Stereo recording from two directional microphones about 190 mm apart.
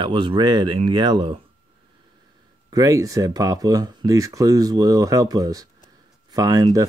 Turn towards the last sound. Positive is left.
turn(degrees=-20)  # may be behind; listen again after turning